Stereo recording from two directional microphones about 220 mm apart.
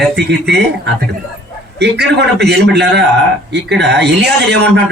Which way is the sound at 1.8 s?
50° right (ahead or behind).